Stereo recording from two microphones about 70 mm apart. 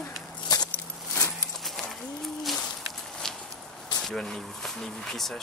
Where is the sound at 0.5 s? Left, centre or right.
Left.